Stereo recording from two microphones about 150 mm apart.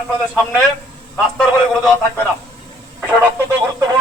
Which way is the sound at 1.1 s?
5° left (ahead or behind).